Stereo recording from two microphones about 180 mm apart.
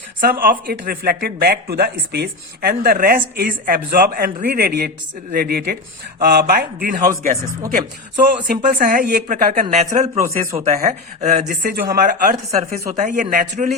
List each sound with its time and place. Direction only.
0.2 s speech: 55° right (ahead or behind)
8.4 s speech: 50° right (ahead or behind)
10.2 s speech: 15° right (ahead or behind)
10.7 s speech: 45° right (ahead or behind)